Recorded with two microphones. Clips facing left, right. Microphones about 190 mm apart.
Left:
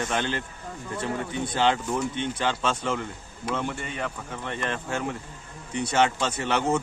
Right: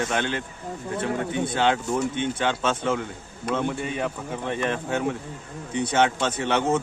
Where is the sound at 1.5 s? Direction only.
5° right (ahead or behind).